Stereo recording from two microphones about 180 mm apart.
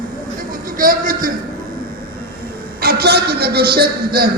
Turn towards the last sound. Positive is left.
turn(degrees=-60)  # may be behind; listen again after turning